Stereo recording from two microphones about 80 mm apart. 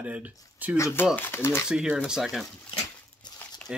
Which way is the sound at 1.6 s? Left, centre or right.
Centre.